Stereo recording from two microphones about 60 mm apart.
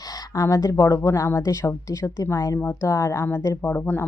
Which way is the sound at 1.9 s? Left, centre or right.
Left.